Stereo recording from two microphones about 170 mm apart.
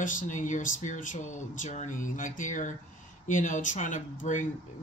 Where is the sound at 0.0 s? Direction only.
50° left (ahead or behind).